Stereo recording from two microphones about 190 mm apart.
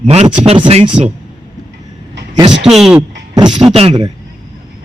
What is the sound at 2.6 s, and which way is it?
Speech, centre (ahead or behind).